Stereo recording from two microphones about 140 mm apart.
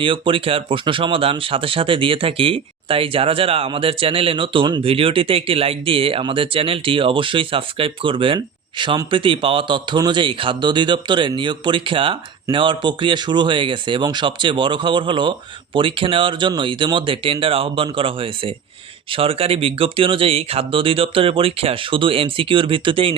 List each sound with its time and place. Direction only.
0.0 s a man's voice: 40° right (ahead or behind)